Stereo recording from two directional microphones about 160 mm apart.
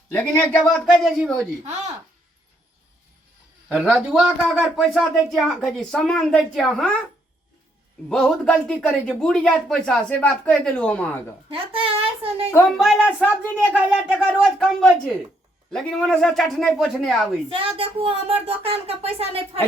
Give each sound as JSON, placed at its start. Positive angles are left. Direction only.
{"t": 0.1, "sound": "speech", "side_deg": 15}
{"t": 0.6, "sound": "speech", "side_deg": 0}
{"t": 1.6, "sound": "speech", "side_deg": -45}
{"t": 3.7, "sound": "a man's voice", "side_deg": -10}
{"t": 8.1, "sound": "speech", "side_deg": 5}
{"t": 11.5, "sound": "a woman's voice", "side_deg": -35}
{"t": 12.7, "sound": "speech", "side_deg": 0}
{"t": 17.5, "sound": "a woman's voice", "side_deg": -35}